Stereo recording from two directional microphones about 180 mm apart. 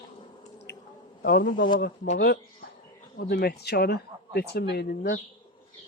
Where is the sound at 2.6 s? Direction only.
55° left (ahead or behind).